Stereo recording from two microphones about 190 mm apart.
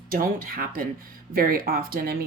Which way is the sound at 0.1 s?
50° right (ahead or behind).